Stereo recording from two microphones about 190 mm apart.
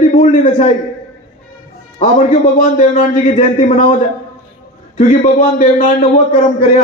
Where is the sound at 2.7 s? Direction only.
40° left (ahead or behind).